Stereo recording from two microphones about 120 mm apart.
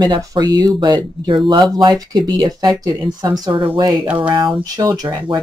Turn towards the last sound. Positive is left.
turn(degrees=-30)  # may be behind; listen again after turning